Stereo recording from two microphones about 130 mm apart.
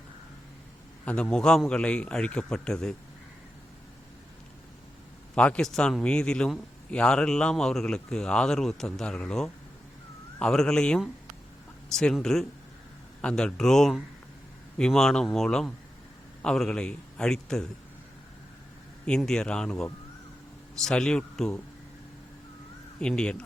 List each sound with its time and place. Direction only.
1.0 s a man's voice: 10° left (ahead or behind)
5.3 s a man's voice: 10° left (ahead or behind)
19.0 s a man's voice: 5° left (ahead or behind)
23.0 s a man's voice: 5° left (ahead or behind)